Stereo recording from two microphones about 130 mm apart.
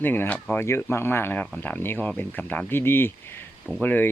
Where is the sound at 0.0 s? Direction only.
15° left (ahead or behind).